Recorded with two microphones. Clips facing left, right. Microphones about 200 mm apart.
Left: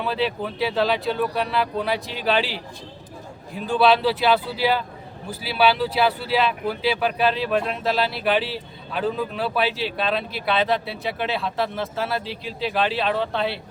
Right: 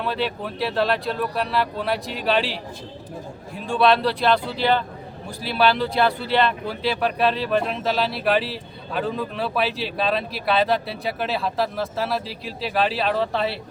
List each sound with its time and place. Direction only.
0.0 s speech: centre (ahead or behind)